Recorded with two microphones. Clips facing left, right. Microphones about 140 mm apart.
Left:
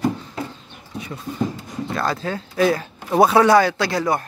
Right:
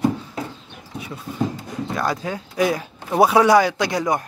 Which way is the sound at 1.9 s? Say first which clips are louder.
Left 1 dB; 15° right (ahead or behind).